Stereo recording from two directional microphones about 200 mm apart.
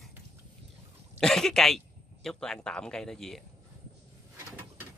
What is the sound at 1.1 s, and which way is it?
Speech, 5° left (ahead or behind).